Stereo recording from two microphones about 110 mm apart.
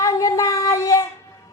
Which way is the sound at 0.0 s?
30° left (ahead or behind).